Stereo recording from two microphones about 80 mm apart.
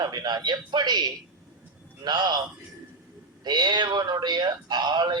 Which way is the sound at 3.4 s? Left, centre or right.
Right.